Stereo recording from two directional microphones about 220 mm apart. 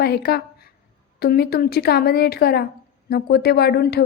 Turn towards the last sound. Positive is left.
turn(degrees=45)  # may be behind; listen again after turning